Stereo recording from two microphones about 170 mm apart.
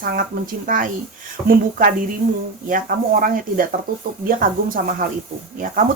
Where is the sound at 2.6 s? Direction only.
55° right (ahead or behind).